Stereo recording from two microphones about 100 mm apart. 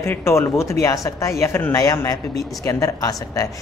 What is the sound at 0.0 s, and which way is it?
A woman's voice, 25° left (ahead or behind).